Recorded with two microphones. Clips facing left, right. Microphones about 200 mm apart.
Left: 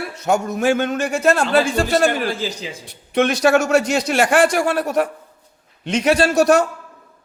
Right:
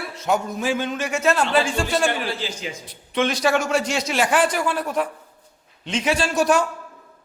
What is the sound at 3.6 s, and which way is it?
Speech, 70° left (ahead or behind).